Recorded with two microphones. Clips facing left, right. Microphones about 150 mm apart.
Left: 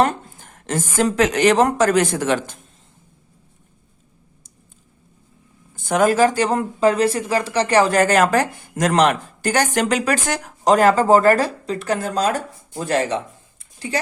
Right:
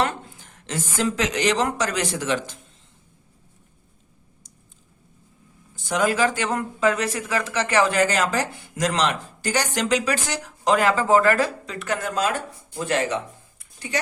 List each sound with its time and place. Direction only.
0.0 s a woman's voice: 45° left (ahead or behind)
5.7 s speech: 50° left (ahead or behind); by 14.0 s 30° left (ahead or behind)